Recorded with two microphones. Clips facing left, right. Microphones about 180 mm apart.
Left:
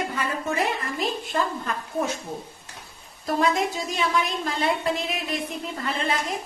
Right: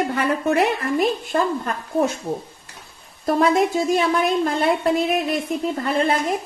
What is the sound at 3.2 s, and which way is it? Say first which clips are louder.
A woman's voice: right 6 dB; 55° right (ahead or behind).